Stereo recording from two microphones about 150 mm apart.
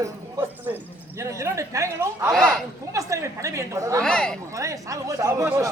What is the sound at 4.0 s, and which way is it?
Speech, 5° left (ahead or behind).